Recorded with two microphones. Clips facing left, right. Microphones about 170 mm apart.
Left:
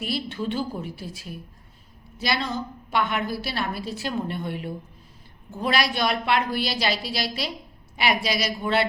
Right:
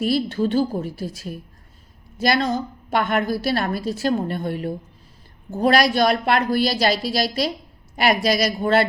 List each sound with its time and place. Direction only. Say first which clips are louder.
0.0 s a woman's voice: right 8 dB; 40° right (ahead or behind)